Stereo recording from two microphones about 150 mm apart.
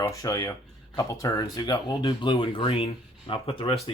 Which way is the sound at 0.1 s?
25° left (ahead or behind).